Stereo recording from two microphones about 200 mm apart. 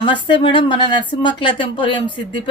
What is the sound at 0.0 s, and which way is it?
Speech, 25° left (ahead or behind).